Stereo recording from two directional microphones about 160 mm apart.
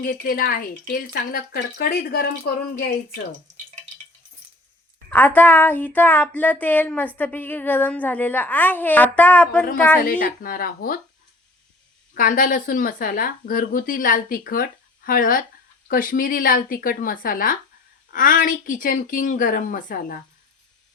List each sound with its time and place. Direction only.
0.0 s speech: 65° left (ahead or behind)
5.1 s speech: 10° left (ahead or behind)
10.0 s speech: 60° left (ahead or behind)
12.1 s speech: 60° left (ahead or behind)